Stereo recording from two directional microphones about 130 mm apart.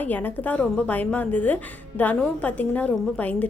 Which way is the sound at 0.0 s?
15° left (ahead or behind).